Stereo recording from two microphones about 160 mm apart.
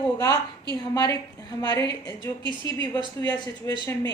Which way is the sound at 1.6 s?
25° left (ahead or behind).